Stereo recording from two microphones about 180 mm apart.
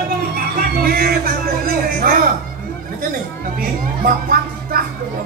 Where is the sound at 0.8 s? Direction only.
55° right (ahead or behind).